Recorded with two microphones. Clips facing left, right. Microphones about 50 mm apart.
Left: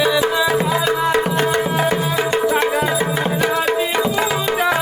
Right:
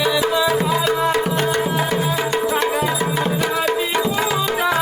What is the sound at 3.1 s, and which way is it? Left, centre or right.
Tabla, centre.